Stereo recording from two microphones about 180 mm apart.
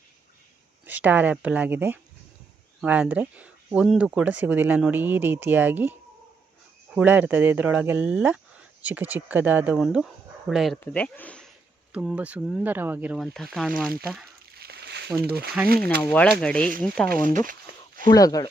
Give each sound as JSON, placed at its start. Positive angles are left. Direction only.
{"t": 0.9, "sound": "speech", "side_deg": -10}
{"t": 11.9, "sound": "speech", "side_deg": -5}
{"t": 13.2, "sound": "speech", "side_deg": 0}
{"t": 14.5, "sound": "a sound", "side_deg": -60}
{"t": 15.2, "sound": "speech", "side_deg": -60}
{"t": 16.0, "sound": "speech", "side_deg": 5}
{"t": 17.2, "sound": "a sound", "side_deg": -50}
{"t": 18.1, "sound": "speech", "side_deg": 20}